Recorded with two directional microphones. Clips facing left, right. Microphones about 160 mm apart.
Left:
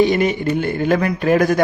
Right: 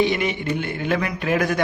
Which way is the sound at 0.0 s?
40° left (ahead or behind).